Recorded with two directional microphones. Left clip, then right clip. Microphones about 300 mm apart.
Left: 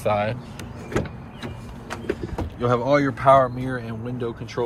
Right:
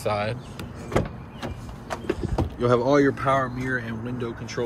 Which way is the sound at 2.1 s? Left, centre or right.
Centre.